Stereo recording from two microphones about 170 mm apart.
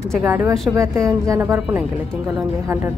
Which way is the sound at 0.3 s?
15° right (ahead or behind).